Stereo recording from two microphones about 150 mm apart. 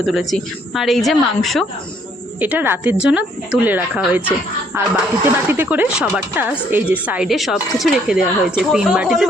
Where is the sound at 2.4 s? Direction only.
10° right (ahead or behind).